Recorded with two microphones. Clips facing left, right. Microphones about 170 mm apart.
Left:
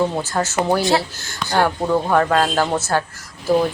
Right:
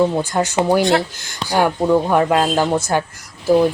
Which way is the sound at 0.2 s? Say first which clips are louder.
Right 3 dB; 15° right (ahead or behind).